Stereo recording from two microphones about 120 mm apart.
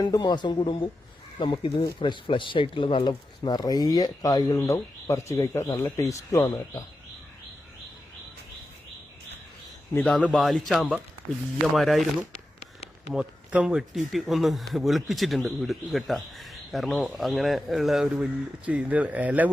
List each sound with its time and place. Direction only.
0.0 s speech: 35° left (ahead or behind)
10.0 s speech: 5° left (ahead or behind)
13.1 s speech: 10° right (ahead or behind)